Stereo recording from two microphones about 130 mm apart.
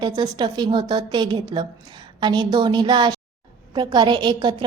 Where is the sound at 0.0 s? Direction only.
35° right (ahead or behind).